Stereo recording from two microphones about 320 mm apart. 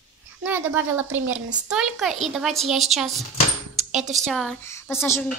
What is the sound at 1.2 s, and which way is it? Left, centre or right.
Speech, right.